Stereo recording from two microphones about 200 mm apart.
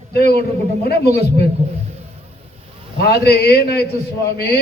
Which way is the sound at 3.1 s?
55° left (ahead or behind).